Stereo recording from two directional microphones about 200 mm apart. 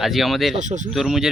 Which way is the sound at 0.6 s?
35° right (ahead or behind).